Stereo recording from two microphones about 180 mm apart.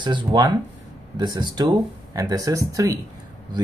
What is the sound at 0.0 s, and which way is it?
Speech, 25° right (ahead or behind).